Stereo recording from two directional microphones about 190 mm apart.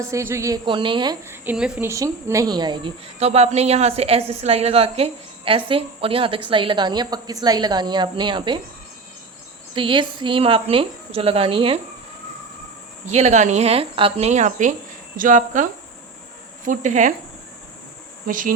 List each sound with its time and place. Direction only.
0.1 s speech: 15° right (ahead or behind)
1.5 s speech: 5° right (ahead or behind)
1.9 s speech: 15° right (ahead or behind)
9.7 s speech: 25° right (ahead or behind)
13.1 s speech: 35° right (ahead or behind)
18.3 s speech: 45° right (ahead or behind)